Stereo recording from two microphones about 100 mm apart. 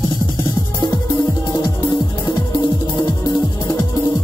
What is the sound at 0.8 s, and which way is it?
Music, 45° left (ahead or behind).